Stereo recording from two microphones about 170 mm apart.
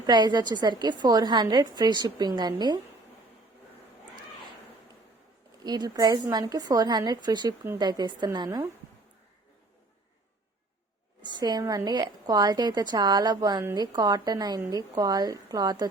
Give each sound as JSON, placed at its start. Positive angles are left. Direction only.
{"t": 0.0, "sound": "a woman's voice", "side_deg": -25}
{"t": 5.6, "sound": "a woman's voice", "side_deg": -25}
{"t": 11.2, "sound": "a woman's voice", "side_deg": -25}